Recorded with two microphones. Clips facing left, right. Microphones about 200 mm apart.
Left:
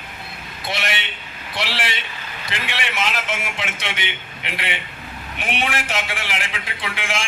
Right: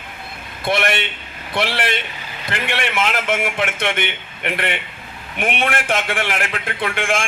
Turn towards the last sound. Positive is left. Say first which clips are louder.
# right 6 dB
turn(degrees=-55)  # may be behind; listen again after turning